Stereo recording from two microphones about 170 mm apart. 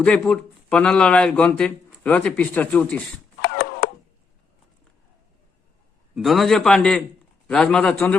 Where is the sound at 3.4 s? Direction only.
75° left (ahead or behind).